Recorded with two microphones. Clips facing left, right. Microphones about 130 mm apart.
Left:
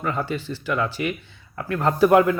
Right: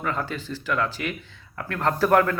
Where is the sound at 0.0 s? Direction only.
5° left (ahead or behind).